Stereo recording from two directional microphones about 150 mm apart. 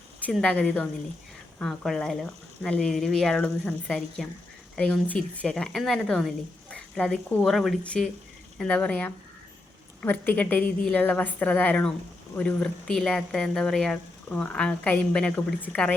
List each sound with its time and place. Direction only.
0.3 s a woman's voice: 5° left (ahead or behind)